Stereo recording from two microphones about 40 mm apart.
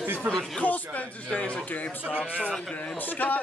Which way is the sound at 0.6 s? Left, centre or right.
Left.